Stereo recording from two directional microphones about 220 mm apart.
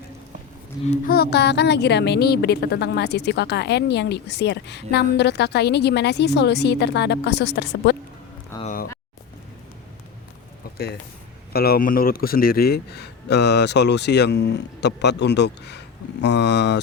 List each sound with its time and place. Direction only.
0.9 s speech: 40° left (ahead or behind)
8.6 s a sound: 40° left (ahead or behind)
11.5 s speech: 45° left (ahead or behind)